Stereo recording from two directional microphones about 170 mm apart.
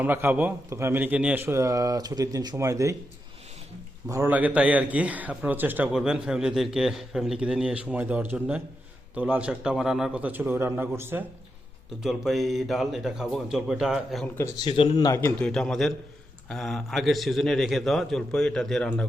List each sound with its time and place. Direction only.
0.0 s a man's voice: 10° right (ahead or behind)
4.1 s a man's voice: 10° right (ahead or behind)
12.0 s a man's voice: centre (ahead or behind)
14.6 s speech: 30° left (ahead or behind)
15.4 s a man's voice: 5° left (ahead or behind)